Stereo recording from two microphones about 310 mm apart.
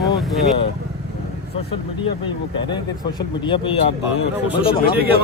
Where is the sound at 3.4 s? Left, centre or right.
Centre.